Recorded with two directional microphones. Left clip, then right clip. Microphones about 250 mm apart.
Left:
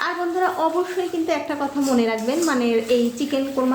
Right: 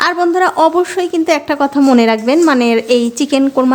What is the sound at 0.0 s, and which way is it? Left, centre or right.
A woman's voice, right.